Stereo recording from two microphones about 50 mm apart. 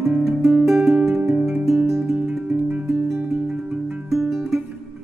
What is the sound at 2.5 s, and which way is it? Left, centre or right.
Music, right.